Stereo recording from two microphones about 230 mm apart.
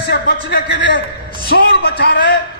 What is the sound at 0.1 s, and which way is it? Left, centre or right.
A man's voice, left.